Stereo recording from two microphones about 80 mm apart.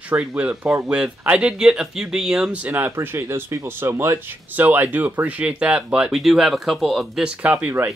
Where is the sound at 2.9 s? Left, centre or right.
Right; by 6.1 s centre.